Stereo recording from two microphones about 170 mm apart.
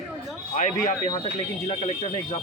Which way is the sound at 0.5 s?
45° left (ahead or behind).